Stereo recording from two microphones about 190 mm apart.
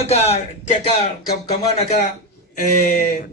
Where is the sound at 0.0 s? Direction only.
35° left (ahead or behind).